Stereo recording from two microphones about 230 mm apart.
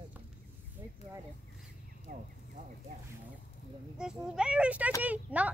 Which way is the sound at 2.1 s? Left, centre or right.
Right.